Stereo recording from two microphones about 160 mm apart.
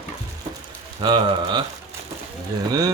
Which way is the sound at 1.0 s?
30° right (ahead or behind).